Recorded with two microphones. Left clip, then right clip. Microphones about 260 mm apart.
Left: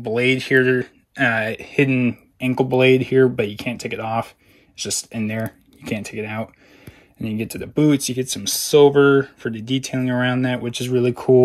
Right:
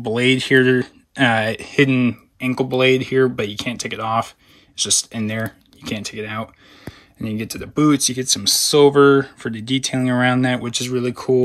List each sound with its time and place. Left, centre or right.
0.0 s speech: centre
2.5 s speech: right
3.1 s speech: centre